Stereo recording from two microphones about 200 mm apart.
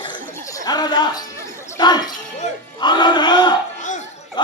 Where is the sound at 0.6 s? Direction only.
20° left (ahead or behind).